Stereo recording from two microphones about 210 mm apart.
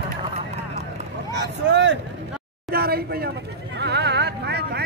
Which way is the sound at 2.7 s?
45° right (ahead or behind).